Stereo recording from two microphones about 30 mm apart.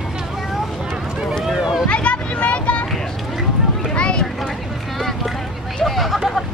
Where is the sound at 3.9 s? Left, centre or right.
Left.